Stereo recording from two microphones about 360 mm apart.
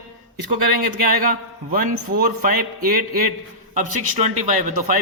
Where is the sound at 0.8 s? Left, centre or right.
Right.